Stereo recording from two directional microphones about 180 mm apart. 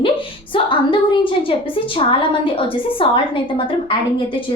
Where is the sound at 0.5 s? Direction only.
30° left (ahead or behind).